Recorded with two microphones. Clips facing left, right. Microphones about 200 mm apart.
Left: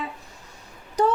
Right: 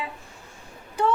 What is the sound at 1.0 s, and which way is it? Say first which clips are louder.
Speech: left 2 dB; 40° left (ahead or behind).